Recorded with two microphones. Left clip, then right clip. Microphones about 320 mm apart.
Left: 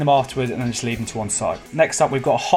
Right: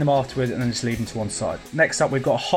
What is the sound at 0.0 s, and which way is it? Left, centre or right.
Speech, left.